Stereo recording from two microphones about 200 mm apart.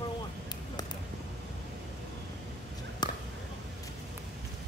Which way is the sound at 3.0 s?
20° left (ahead or behind).